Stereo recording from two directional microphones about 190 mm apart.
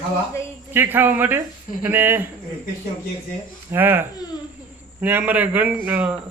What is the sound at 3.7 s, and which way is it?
Speech, 10° right (ahead or behind).